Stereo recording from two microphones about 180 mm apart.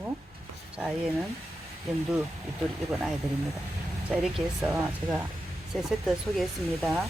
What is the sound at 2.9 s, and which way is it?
Speech, centre (ahead or behind).